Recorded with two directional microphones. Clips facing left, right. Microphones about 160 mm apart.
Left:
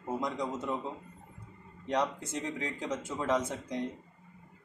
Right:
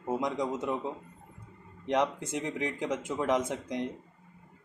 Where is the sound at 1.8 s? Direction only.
15° right (ahead or behind).